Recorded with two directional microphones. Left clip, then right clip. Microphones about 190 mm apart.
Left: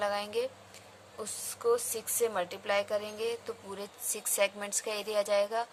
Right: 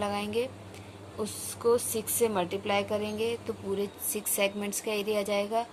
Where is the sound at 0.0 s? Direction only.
35° left (ahead or behind).